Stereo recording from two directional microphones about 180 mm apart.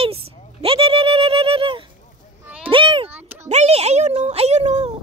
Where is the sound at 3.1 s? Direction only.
10° right (ahead or behind).